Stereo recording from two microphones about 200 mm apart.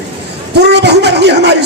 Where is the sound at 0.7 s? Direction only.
55° right (ahead or behind).